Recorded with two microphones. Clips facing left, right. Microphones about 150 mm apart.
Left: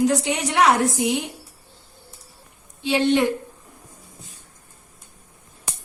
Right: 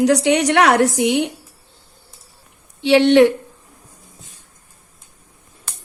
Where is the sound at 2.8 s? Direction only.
75° right (ahead or behind).